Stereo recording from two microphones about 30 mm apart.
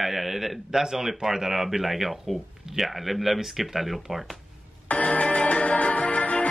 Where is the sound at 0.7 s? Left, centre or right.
Centre.